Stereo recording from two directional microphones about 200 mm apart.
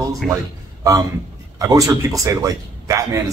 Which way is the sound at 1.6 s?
15° right (ahead or behind).